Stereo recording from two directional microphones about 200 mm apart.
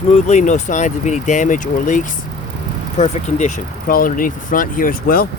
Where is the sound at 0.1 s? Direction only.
35° left (ahead or behind).